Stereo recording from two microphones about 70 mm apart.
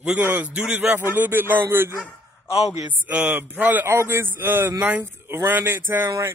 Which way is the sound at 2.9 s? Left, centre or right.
Right.